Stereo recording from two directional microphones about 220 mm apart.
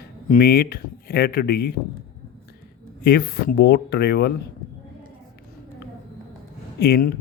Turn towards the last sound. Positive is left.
turn(degrees=50)  # may be behind; listen again after turning